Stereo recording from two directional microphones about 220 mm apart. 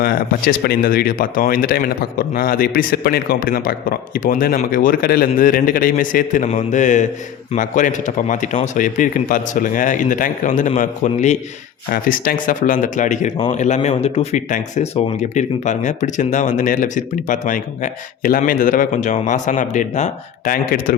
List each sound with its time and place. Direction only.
0.0 s speech: 45° left (ahead or behind)